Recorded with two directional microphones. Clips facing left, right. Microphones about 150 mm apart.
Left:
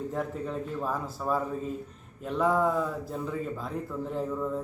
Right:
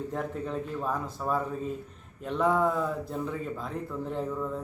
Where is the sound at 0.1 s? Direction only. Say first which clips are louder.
Even; centre (ahead or behind).